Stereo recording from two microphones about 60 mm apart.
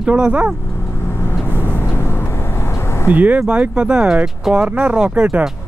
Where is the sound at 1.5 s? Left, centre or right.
Left.